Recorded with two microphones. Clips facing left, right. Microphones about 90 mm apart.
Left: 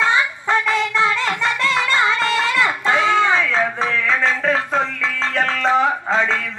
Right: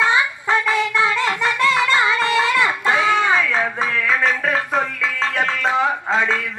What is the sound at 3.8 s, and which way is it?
Music, 10° right (ahead or behind).